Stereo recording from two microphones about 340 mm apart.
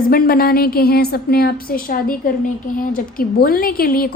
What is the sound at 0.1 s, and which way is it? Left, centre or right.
A woman's voice, left.